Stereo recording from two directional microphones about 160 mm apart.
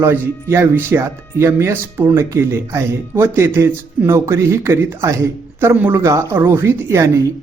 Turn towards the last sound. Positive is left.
turn(degrees=-15)  # may be behind; listen again after turning